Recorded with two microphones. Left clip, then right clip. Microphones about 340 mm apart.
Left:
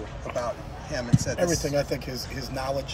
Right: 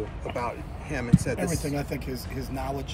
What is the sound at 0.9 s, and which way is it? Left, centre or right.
Speech, right.